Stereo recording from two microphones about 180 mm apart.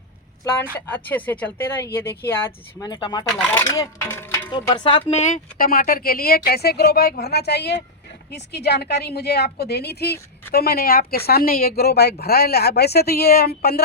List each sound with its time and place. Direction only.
0.5 s speech: 10° left (ahead or behind)
3.2 s speech: 5° left (ahead or behind)
4.5 s speech: 25° left (ahead or behind); by 13.8 s 60° left (ahead or behind)